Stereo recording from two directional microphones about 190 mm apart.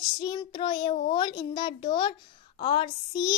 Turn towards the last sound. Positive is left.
turn(degrees=25)  # may be behind; listen again after turning